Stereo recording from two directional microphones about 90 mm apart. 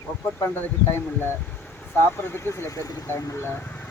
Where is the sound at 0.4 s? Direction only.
30° left (ahead or behind).